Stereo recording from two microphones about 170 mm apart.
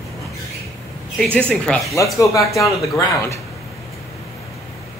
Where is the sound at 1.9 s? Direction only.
20° left (ahead or behind).